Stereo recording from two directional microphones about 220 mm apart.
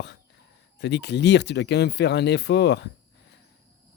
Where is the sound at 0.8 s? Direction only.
50° left (ahead or behind).